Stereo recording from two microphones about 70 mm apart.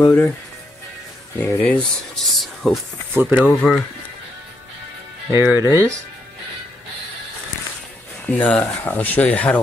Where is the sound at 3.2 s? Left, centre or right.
Right.